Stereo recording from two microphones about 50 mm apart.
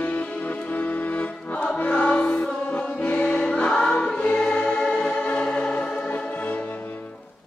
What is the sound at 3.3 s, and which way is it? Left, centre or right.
Choir, left.